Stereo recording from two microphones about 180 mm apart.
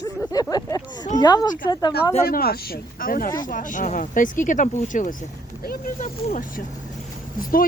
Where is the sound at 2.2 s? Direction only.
60° left (ahead or behind).